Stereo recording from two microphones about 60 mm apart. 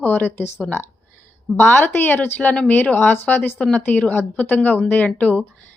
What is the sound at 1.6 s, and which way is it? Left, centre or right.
Speech, left.